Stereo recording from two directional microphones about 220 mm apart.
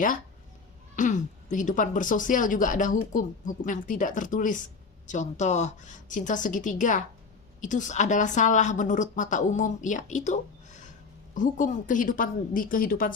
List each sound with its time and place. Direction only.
0.9 s speech: 35° left (ahead or behind)